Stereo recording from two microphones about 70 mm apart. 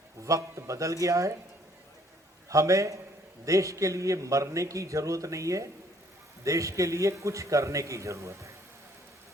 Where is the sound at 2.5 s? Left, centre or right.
Right.